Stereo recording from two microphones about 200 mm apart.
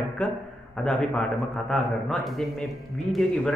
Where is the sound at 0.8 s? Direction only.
5° left (ahead or behind).